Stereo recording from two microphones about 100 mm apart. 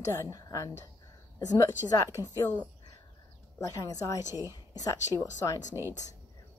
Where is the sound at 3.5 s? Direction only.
35° left (ahead or behind).